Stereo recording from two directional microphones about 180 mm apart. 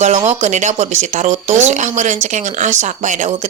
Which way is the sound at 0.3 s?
40° right (ahead or behind).